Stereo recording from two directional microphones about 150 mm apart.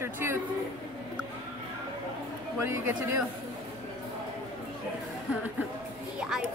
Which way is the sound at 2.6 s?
15° right (ahead or behind).